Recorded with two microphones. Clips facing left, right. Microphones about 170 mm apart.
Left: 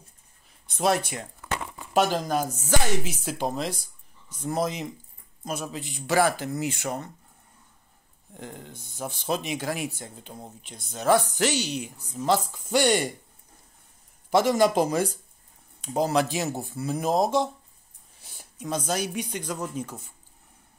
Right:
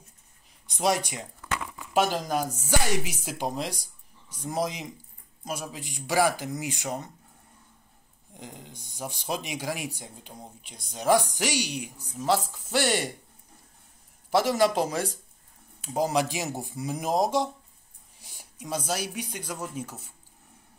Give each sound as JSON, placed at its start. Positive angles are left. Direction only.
{"t": 0.7, "sound": "speech", "side_deg": -15}
{"t": 1.5, "sound": "crumpling", "side_deg": 30}
{"t": 2.0, "sound": "speech", "side_deg": -10}
{"t": 8.4, "sound": "speech", "side_deg": -15}
{"t": 14.3, "sound": "speech", "side_deg": -5}